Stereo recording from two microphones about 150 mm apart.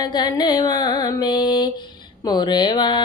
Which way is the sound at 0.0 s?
30° left (ahead or behind).